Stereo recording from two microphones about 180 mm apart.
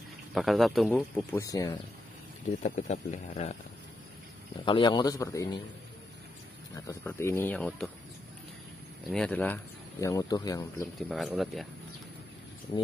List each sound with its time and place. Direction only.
0.3 s speech: centre (ahead or behind)
1.1 s a man's voice: 15° left (ahead or behind)
2.6 s speech: 40° left (ahead or behind)
4.6 s a man's voice: 25° left (ahead or behind)
6.7 s speech: 15° left (ahead or behind)
9.1 s speech: 5° left (ahead or behind)
11.0 s speech: centre (ahead or behind)